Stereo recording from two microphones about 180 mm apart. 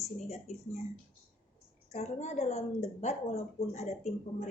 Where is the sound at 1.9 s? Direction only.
40° left (ahead or behind).